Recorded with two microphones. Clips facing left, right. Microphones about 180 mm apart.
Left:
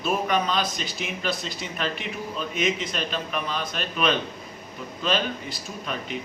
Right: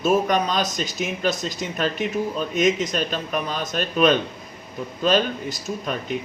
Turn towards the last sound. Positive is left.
turn(degrees=-45)  # may be behind; listen again after turning